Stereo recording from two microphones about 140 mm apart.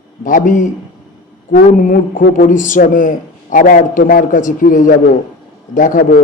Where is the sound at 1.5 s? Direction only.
90° left.